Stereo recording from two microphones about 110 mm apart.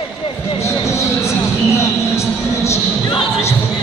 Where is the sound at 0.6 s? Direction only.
25° left (ahead or behind).